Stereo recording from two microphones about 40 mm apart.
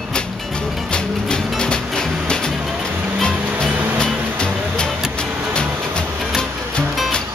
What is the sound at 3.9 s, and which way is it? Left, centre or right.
Music, left.